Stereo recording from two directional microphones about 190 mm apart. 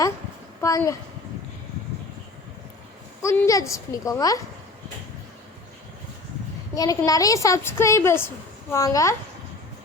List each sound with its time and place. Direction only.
0.6 s a woman's voice: 15° left (ahead or behind)
3.2 s a woman's voice: 15° left (ahead or behind)
6.7 s a woman's voice: 20° left (ahead or behind)